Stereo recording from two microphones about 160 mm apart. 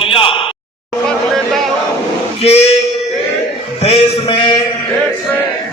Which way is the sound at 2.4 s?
40° left (ahead or behind).